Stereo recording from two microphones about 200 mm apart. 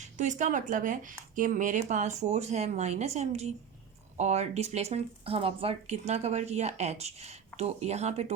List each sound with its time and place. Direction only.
0.0 s speech: 40° right (ahead or behind)